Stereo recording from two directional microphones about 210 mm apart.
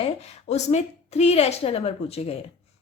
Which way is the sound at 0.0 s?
30° left (ahead or behind).